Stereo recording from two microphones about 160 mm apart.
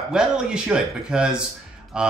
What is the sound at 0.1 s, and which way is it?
Speech, 5° right (ahead or behind).